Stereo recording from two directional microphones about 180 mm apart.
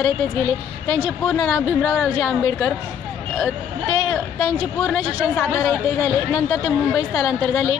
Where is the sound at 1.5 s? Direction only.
Centre (ahead or behind).